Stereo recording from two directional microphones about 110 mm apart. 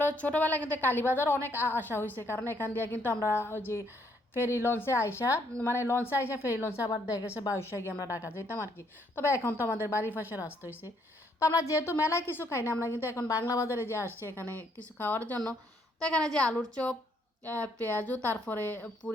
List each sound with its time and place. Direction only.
0.0 s a woman's voice: 15° left (ahead or behind)
10.2 s a woman's voice: 15° right (ahead or behind)
11.3 s a woman's voice: 25° left (ahead or behind)